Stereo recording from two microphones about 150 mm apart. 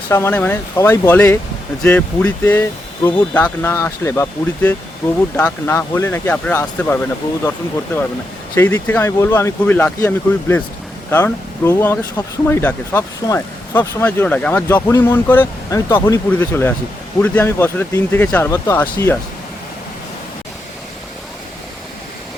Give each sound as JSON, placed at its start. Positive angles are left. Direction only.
{"t": 0.1, "sound": "speech", "side_deg": 15}
{"t": 8.5, "sound": "speech", "side_deg": 15}